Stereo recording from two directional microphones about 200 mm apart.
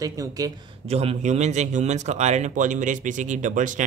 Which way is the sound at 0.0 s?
15° right (ahead or behind).